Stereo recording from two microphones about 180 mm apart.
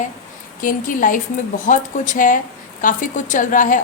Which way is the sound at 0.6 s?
50° left (ahead or behind).